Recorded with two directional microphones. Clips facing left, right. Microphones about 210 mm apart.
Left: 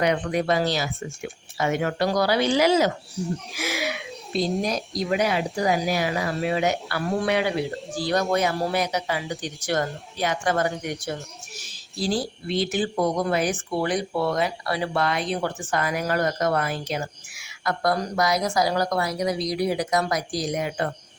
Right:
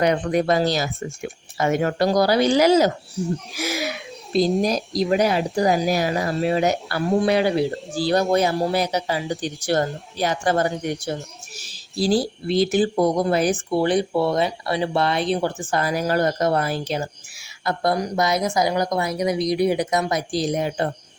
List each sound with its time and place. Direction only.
0.0 s speech: 40° right (ahead or behind)